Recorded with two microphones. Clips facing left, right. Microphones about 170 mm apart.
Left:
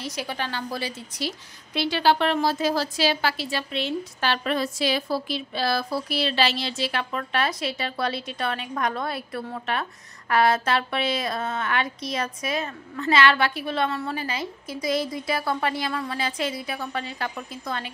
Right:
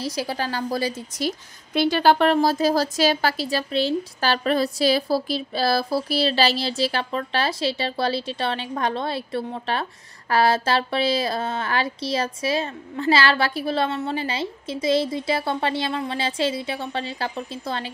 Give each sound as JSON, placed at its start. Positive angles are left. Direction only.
{"t": 0.0, "sound": "a woman's voice", "side_deg": -35}